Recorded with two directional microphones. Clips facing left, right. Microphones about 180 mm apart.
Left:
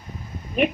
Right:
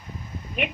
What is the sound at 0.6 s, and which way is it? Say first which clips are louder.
Speech: left 8 dB; 40° left (ahead or behind).